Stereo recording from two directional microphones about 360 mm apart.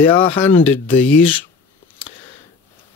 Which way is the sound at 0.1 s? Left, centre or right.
Centre.